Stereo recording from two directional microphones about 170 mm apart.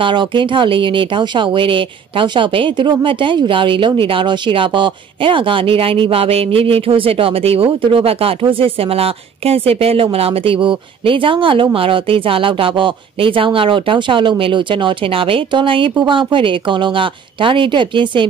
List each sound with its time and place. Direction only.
0.0 s speech: 30° right (ahead or behind)